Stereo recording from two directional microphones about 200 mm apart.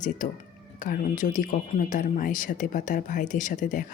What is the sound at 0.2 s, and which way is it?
Speech, 40° left (ahead or behind).